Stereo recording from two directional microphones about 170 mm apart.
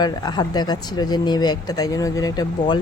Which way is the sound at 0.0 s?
25° left (ahead or behind).